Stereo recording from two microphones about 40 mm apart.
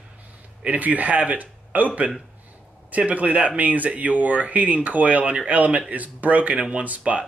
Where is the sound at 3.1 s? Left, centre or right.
Right.